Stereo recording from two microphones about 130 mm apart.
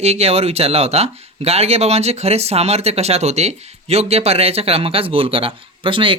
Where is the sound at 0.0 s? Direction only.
55° right (ahead or behind).